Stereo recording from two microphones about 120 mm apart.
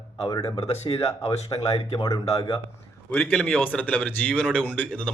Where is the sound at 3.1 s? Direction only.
15° left (ahead or behind).